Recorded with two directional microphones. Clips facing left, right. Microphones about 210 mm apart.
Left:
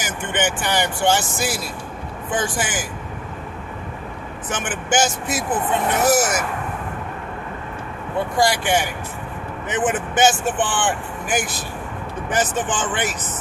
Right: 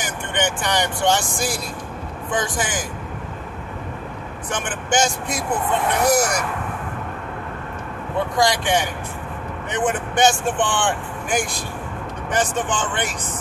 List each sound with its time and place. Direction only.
0.0 s speech: 5° left (ahead or behind)
4.5 s speech: 5° left (ahead or behind)
8.4 s speech: 5° left (ahead or behind)